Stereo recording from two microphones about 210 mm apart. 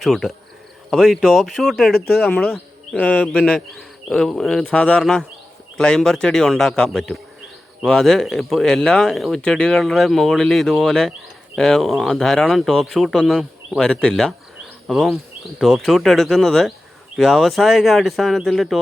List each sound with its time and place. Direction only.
0.0 s speech: centre (ahead or behind)